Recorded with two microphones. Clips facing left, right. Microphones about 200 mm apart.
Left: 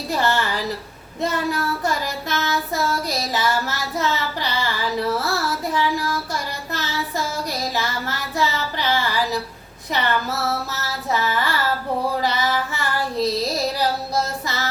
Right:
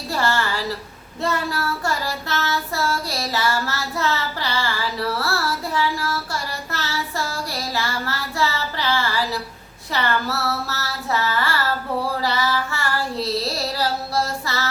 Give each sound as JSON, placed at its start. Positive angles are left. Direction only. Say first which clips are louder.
{"t": 0.1, "sound": "a sound", "louder": "left 1 dB", "side_deg": 20}
{"t": 1.2, "sound": "child singing", "louder": "left 1 dB", "side_deg": 20}
{"t": 12.2, "sound": "female singing", "louder": "left 1 dB", "side_deg": 20}
{"t": 14.4, "sound": "child singing", "louder": "even", "side_deg": 20}